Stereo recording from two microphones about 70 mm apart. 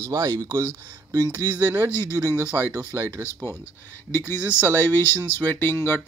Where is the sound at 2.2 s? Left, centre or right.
Right.